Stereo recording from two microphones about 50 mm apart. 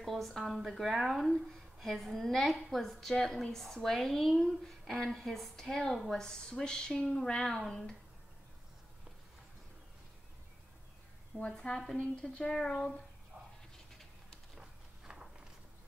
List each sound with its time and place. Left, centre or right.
0.0 s a woman's voice: centre
11.5 s a woman's voice: centre
12.0 s a woman's voice: left
14.5 s a sound: centre